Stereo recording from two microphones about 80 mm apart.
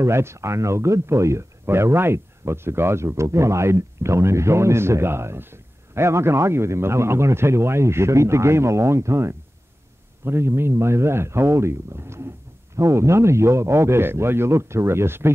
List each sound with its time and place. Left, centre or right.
0.0 s speech: right